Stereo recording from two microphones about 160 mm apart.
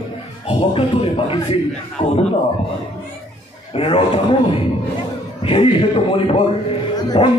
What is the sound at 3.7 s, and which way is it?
A man's voice, 35° left (ahead or behind).